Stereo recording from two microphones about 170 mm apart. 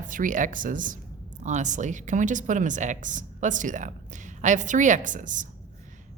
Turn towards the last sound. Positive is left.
turn(degrees=-50)  # may be behind; listen again after turning